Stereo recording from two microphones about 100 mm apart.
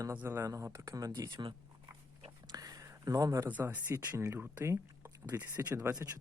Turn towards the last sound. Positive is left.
turn(degrees=-30)  # may be behind; listen again after turning